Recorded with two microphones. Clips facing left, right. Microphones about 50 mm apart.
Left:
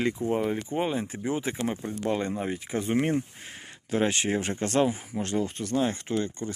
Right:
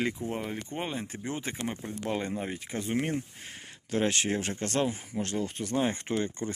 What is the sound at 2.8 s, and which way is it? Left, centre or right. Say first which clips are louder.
Speech: left 5 dB; left.